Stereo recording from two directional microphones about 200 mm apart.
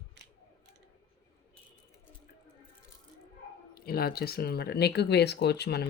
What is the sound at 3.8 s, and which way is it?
Speech, 50° left (ahead or behind).